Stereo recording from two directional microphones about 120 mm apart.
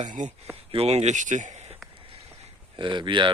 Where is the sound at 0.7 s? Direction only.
60° right (ahead or behind); by 1.5 s 90° right.